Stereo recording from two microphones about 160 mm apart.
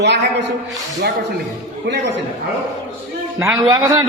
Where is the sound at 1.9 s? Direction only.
90° right.